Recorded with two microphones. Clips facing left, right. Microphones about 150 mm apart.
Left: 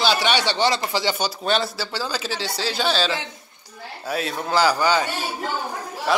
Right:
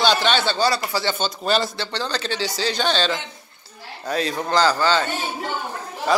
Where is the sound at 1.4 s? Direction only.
Centre (ahead or behind).